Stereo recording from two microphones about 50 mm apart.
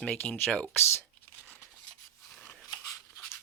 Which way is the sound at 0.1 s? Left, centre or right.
Left.